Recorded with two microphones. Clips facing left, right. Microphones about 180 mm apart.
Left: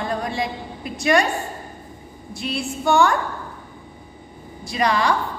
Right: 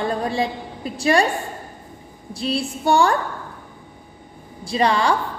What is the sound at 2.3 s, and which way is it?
Speech, 30° right (ahead or behind).